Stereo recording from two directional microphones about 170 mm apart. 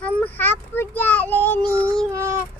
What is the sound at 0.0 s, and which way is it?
Child singing, 10° left (ahead or behind).